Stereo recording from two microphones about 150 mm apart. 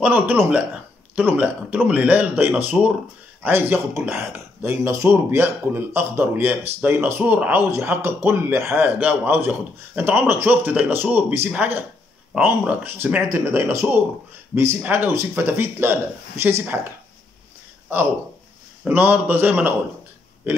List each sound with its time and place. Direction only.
0.0 s speech: 10° right (ahead or behind)
18.9 s speech: 15° right (ahead or behind)